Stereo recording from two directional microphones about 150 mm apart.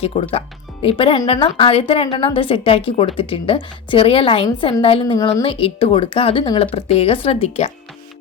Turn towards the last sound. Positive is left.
turn(degrees=40)  # may be behind; listen again after turning